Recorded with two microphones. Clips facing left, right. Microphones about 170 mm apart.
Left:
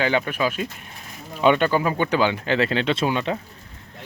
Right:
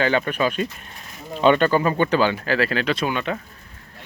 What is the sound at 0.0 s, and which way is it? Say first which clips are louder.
Speech: right 1 dB; 10° left (ahead or behind).